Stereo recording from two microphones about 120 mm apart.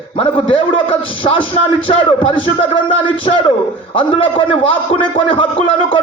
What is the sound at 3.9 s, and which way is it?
A man's voice, 45° left (ahead or behind).